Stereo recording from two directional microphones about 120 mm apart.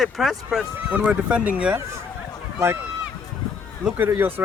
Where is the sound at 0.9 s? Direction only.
10° right (ahead or behind).